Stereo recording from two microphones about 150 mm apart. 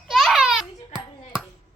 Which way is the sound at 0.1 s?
Centre (ahead or behind).